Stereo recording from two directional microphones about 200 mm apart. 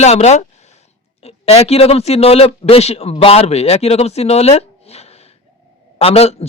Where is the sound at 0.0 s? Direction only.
35° left (ahead or behind).